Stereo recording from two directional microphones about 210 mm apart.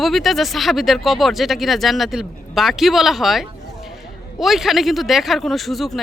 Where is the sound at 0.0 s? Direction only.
Centre (ahead or behind).